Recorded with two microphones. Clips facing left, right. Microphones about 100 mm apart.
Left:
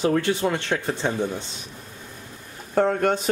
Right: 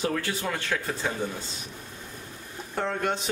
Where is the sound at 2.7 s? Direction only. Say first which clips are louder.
Left 8 dB; 50° left (ahead or behind).